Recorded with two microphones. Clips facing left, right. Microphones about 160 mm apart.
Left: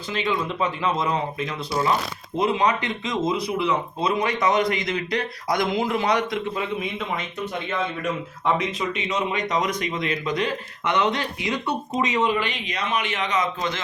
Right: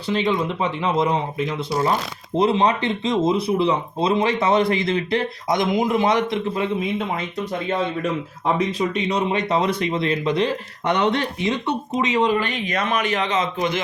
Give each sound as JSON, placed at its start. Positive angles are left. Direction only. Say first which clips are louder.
{"t": 0.3, "sound": "speech", "louder": "right 3 dB", "side_deg": -30}
{"t": 8.4, "sound": "speech", "louder": "right 3 dB", "side_deg": -35}
{"t": 12.3, "sound": "speech", "louder": "right 4 dB", "side_deg": -45}